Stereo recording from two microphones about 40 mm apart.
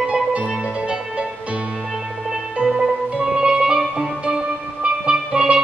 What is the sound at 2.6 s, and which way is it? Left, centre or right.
Music, centre.